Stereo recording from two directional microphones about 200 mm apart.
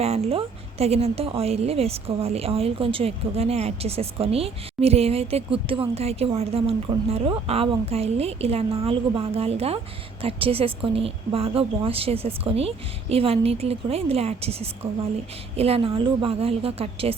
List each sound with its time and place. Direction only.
0.0 s speech: 30° right (ahead or behind)